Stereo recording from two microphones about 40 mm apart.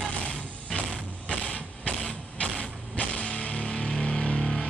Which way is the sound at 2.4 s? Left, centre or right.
Left.